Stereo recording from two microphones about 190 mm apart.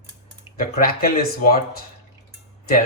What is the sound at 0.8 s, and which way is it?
Speech, 50° left (ahead or behind).